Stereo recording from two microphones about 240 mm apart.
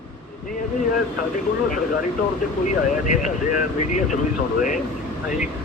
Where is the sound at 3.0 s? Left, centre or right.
Left.